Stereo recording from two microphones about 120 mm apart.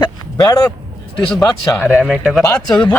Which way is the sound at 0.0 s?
35° left (ahead or behind).